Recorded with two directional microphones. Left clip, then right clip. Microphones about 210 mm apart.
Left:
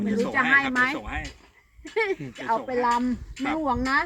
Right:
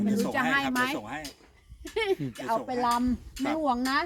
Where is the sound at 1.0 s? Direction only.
25° right (ahead or behind).